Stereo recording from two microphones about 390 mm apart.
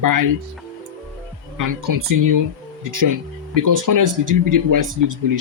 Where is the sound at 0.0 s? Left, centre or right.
Right.